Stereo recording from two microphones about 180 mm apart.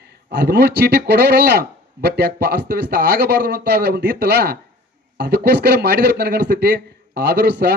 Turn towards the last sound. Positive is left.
turn(degrees=-65)  # may be behind; listen again after turning